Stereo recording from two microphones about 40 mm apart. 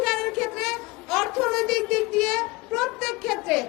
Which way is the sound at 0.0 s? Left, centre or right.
Centre.